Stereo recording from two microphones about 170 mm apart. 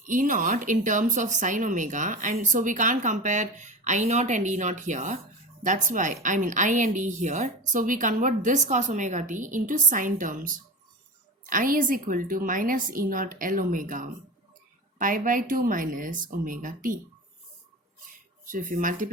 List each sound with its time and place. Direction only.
0.0 s speech: 50° right (ahead or behind)
18.4 s speech: 50° right (ahead or behind)